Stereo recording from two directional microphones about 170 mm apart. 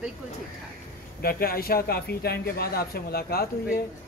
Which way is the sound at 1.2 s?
60° left (ahead or behind).